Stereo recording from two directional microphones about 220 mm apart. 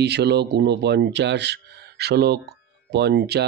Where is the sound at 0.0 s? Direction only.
50° right (ahead or behind).